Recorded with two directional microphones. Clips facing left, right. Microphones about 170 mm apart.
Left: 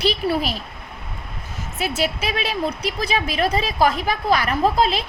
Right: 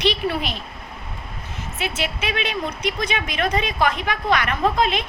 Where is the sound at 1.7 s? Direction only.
40° left (ahead or behind).